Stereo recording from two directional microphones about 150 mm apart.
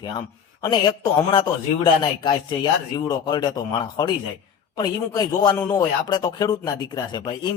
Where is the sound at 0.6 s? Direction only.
30° left (ahead or behind).